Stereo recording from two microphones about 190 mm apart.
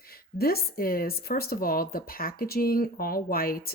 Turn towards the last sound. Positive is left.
turn(degrees=50)  # may be behind; listen again after turning